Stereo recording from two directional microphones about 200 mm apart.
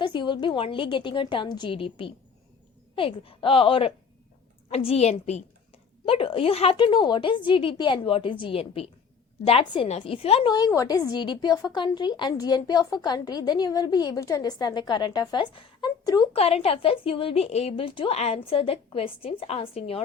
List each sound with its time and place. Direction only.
0.0 s a woman's voice: 25° left (ahead or behind)
10.5 s a woman's voice: 15° left (ahead or behind)